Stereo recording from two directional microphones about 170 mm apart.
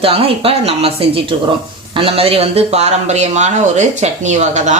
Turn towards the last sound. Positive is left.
turn(degrees=-45)  # may be behind; listen again after turning